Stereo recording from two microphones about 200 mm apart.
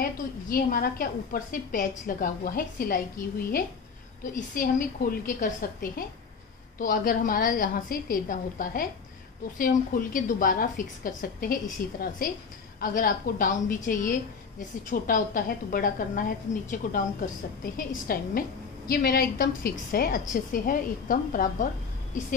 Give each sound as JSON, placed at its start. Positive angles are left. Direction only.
{"t": 0.0, "sound": "a woman's voice", "side_deg": 45}